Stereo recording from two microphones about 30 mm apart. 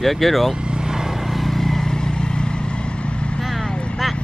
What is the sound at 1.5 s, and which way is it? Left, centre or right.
Vehicle, centre.